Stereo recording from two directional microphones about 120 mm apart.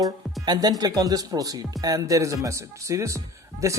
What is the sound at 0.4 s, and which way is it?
Speech, 35° right (ahead or behind).